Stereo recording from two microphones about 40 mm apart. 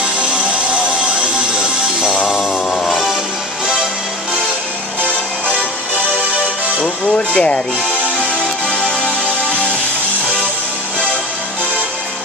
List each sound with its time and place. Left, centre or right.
1.5 s music: centre
2.8 s music: centre
7.2 s speech: left
8.6 s music: left